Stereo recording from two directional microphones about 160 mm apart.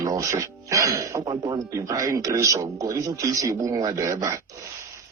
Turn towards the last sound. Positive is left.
turn(degrees=-20)  # may be behind; listen again after turning